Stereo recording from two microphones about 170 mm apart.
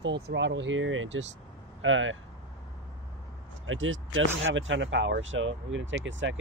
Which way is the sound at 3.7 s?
90° right.